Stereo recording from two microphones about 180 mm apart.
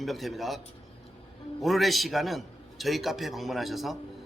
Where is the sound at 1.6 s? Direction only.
Centre (ahead or behind).